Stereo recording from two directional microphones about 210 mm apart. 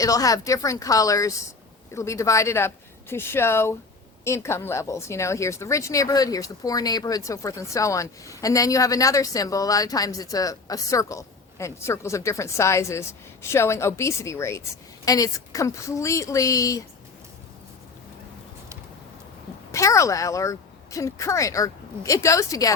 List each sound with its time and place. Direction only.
0.0 s a woman's voice: 15° left (ahead or behind)
19.7 s a woman's voice: 15° left (ahead or behind)